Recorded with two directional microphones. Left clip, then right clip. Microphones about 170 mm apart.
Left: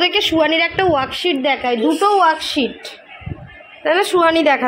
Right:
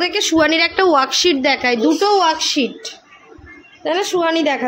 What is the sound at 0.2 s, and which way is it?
A woman's voice, 20° right (ahead or behind).